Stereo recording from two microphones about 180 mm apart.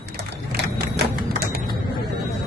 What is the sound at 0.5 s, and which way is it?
Typewriter, 70° right (ahead or behind).